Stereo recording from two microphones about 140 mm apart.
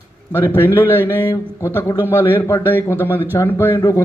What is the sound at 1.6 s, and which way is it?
Speech, 15° left (ahead or behind).